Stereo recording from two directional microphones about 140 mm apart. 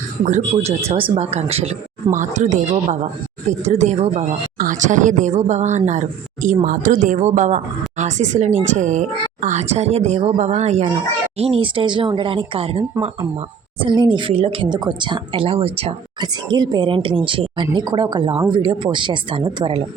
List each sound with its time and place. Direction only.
0.9 s speech: 40° right (ahead or behind)
1.1 s speech: 55° right (ahead or behind)
2.0 s speech: 60° right (ahead or behind)
4.5 s speech: 75° right (ahead or behind); by 16.0 s 45° right (ahead or behind)
16.2 s speech: 30° right (ahead or behind)